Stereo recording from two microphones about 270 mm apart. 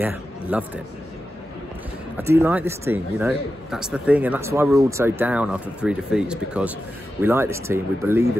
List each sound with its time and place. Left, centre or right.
0.0 s a man's voice: centre
2.1 s a man's voice: centre